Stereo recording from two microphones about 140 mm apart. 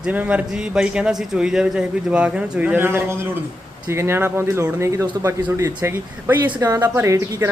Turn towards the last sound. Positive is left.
turn(degrees=-20)  # may be behind; listen again after turning